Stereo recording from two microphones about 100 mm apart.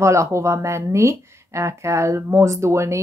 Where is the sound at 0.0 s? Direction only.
30° right (ahead or behind).